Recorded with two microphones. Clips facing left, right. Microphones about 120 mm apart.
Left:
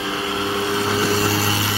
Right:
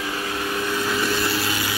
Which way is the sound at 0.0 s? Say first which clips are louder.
Left 3 dB; 25° left (ahead or behind).